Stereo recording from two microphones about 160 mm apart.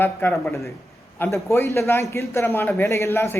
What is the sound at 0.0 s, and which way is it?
A man's voice, 10° left (ahead or behind).